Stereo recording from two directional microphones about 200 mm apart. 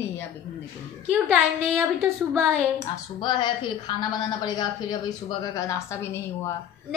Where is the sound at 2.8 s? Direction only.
20° left (ahead or behind).